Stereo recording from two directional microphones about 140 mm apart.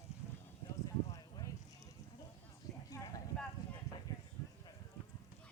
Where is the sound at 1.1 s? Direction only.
25° left (ahead or behind).